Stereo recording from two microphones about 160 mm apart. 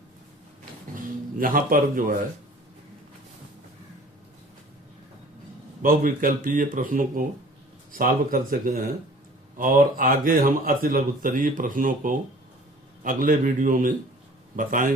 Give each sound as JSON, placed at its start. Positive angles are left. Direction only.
{"t": 0.9, "sound": "speech", "side_deg": -60}
{"t": 5.8, "sound": "a man's voice", "side_deg": -60}